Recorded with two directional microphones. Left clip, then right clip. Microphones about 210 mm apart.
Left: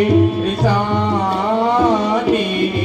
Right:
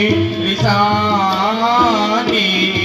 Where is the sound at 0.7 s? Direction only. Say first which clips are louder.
Right 4 dB; 60° left (ahead or behind).